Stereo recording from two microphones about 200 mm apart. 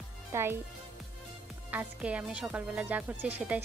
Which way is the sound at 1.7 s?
5° right (ahead or behind).